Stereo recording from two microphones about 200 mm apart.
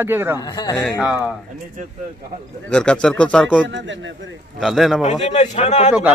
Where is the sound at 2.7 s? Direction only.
5° left (ahead or behind).